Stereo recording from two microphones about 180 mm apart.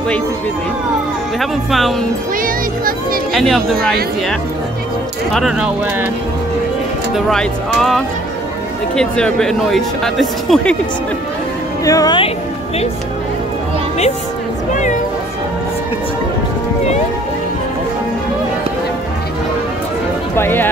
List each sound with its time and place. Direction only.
1.4 s speech: centre (ahead or behind)
2.4 s a child's voice: 50° right (ahead or behind)
3.3 s speech: centre (ahead or behind)
7.2 s speech: centre (ahead or behind)
11.8 s speech: 20° left (ahead or behind)
14.7 s speech: 45° left (ahead or behind)
20.3 s speech: 10° left (ahead or behind)